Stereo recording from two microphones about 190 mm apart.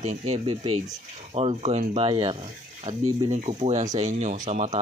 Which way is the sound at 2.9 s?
40° right (ahead or behind).